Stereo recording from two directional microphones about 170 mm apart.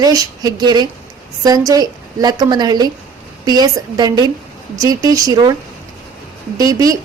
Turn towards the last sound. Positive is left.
turn(degrees=-20)  # may be behind; listen again after turning